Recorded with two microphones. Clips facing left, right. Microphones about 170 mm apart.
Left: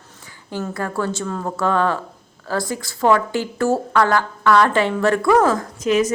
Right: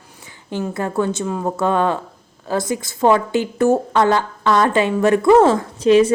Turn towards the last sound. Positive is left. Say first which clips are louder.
# right 6 dB
turn(degrees=-30)  # may be behind; listen again after turning